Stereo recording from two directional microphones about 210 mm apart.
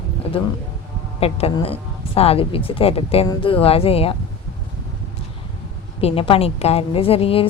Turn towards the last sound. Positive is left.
turn(degrees=25)  # may be behind; listen again after turning